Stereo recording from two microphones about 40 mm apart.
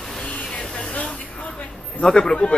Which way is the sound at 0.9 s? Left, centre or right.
Left.